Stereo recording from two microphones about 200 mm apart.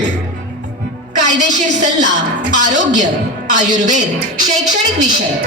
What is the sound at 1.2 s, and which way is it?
Speech, 40° right (ahead or behind).